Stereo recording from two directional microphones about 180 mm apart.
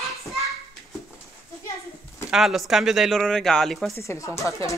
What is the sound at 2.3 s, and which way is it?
Speech, centre (ahead or behind).